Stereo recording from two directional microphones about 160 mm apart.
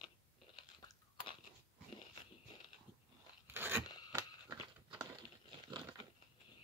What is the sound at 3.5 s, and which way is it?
Crunch, 15° right (ahead or behind).